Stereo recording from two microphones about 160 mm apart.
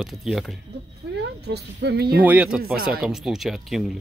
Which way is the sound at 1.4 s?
90° right.